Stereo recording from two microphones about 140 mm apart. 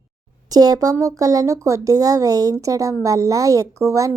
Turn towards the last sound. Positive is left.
turn(degrees=-20)  # may be behind; listen again after turning